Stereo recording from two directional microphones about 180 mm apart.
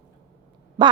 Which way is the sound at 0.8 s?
25° right (ahead or behind).